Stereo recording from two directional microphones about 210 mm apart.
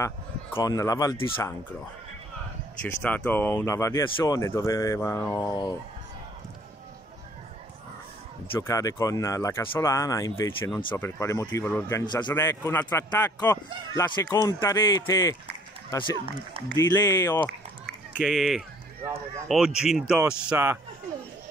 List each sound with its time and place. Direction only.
0.0 s speech: 15° left (ahead or behind)
2.8 s speech: 5° left (ahead or behind)
8.5 s speech: 15° left (ahead or behind)
18.1 s speech: centre (ahead or behind)